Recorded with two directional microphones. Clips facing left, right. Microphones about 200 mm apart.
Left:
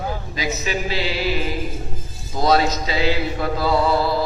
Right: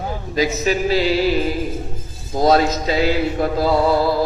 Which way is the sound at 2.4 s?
45° right (ahead or behind).